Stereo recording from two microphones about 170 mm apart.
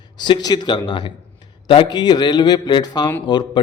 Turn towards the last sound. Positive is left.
turn(degrees=25)  # may be behind; listen again after turning